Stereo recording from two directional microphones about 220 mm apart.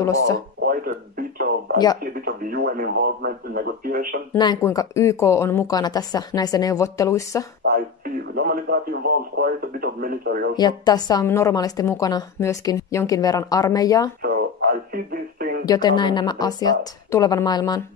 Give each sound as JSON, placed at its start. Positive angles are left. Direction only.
{"t": 0.0, "sound": "a woman's voice", "side_deg": 15}
{"t": 0.7, "sound": "speech", "side_deg": -40}
{"t": 4.4, "sound": "a woman's voice", "side_deg": 15}
{"t": 7.6, "sound": "speech", "side_deg": -45}
{"t": 10.5, "sound": "a woman's voice", "side_deg": 20}
{"t": 14.2, "sound": "a sound", "side_deg": -45}
{"t": 15.6, "sound": "a woman's voice", "side_deg": 20}